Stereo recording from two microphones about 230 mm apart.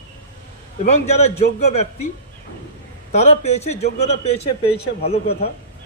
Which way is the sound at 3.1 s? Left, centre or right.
Left.